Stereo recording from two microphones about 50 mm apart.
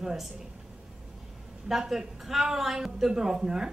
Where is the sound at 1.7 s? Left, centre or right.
Centre.